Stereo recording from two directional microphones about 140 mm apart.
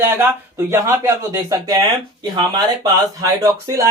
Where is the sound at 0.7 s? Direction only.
20° right (ahead or behind).